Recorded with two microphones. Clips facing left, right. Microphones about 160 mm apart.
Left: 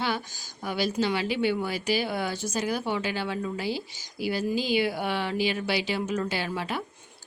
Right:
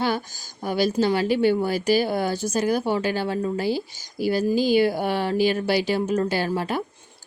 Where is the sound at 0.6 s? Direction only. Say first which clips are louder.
Right 6 dB; 40° right (ahead or behind).